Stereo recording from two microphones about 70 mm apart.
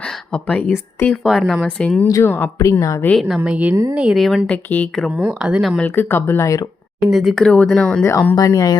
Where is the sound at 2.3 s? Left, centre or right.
Left.